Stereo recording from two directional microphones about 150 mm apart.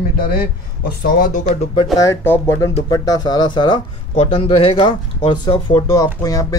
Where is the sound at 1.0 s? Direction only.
65° left (ahead or behind).